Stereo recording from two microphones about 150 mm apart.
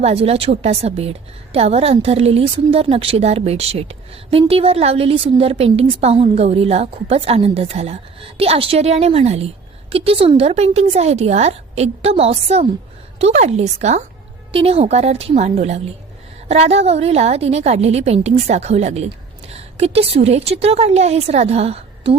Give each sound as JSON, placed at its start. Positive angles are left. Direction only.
{"t": 0.0, "sound": "a woman's voice", "side_deg": -45}